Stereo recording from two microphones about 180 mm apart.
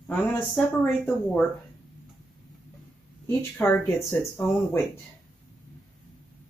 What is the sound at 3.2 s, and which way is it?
Speech, 15° left (ahead or behind).